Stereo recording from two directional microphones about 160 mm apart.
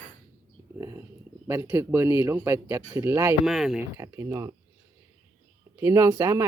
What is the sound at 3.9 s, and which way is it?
Speech, 15° right (ahead or behind).